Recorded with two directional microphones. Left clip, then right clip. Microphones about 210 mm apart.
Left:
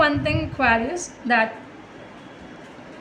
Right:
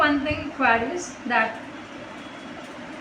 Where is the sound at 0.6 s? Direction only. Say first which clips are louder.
Left 1 dB; 55° left (ahead or behind).